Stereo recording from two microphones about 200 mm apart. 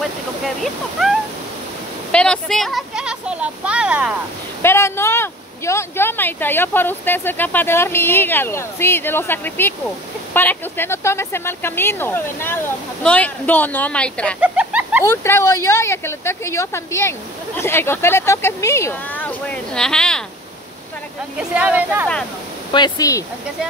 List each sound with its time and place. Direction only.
0.9 s a sound: centre (ahead or behind)
2.1 s speech: 5° left (ahead or behind)
4.6 s speech: 10° left (ahead or behind)
14.4 s bird: 5° right (ahead or behind)
15.0 s speech: 15° left (ahead or behind)
21.4 s speech: 5° right (ahead or behind)
22.7 s speech: 20° left (ahead or behind)